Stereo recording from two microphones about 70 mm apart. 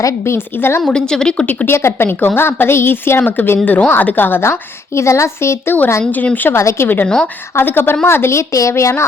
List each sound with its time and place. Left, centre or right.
0.3 s a woman's voice: left
0.9 s a woman's voice: centre
1.5 s a woman's voice: left
4.9 s a woman's voice: left
6.1 s speech: left
6.6 s a woman's voice: left
6.8 s a woman's voice: left